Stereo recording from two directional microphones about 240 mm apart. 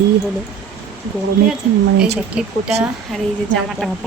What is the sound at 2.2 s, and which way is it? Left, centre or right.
A woman's voice, centre.